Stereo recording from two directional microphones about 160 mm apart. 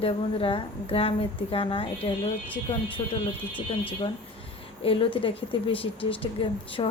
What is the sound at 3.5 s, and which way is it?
Speech, 10° left (ahead or behind).